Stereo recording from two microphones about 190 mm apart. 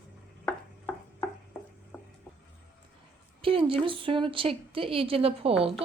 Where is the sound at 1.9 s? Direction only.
10° left (ahead or behind).